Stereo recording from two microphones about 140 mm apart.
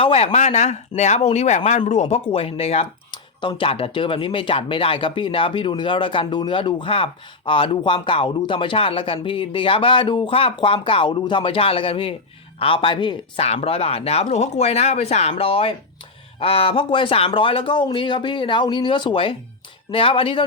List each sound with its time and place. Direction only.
0.0 s speech: 45° left (ahead or behind)
13.4 s speech: 45° left (ahead or behind)